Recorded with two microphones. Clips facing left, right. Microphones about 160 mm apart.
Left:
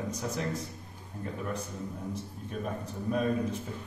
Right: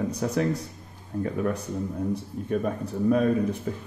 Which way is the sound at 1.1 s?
50° right (ahead or behind).